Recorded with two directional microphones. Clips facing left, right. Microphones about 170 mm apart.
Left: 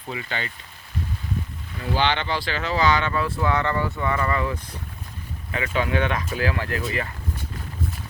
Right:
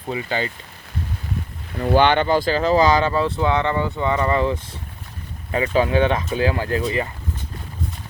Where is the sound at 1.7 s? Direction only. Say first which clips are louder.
Right 8 dB; 55° right (ahead or behind); by 6.8 s 25° right (ahead or behind).